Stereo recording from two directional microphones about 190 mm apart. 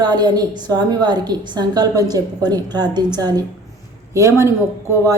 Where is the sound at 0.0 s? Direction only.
20° right (ahead or behind).